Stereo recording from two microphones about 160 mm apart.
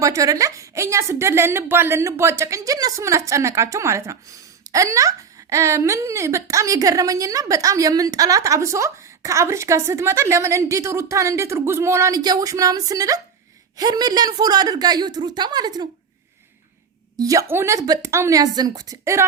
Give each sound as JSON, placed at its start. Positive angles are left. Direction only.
{"t": 0.0, "sound": "a woman's voice", "side_deg": -20}
{"t": 17.2, "sound": "a woman's voice", "side_deg": -20}